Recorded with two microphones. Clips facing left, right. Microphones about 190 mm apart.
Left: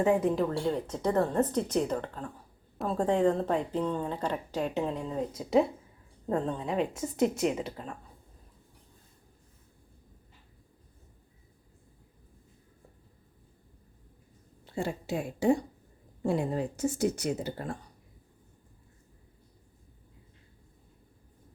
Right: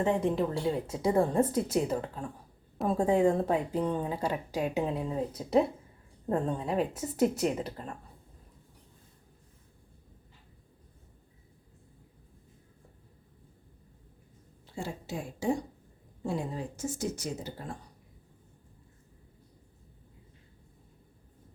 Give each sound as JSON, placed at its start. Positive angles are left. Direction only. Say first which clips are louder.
{"t": 0.0, "sound": "a woman's voice", "louder": "left 2 dB", "side_deg": 5}
{"t": 14.8, "sound": "speech", "louder": "left 5 dB", "side_deg": 65}